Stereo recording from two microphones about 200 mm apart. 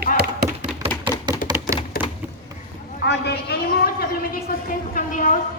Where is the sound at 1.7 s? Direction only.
45° left (ahead or behind).